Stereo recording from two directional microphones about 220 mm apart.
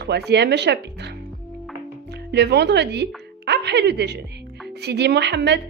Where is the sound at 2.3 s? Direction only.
50° right (ahead or behind).